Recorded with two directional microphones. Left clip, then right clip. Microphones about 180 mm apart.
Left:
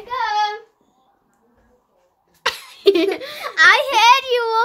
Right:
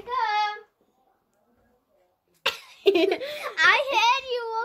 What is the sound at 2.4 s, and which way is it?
Laughter, 10° left (ahead or behind).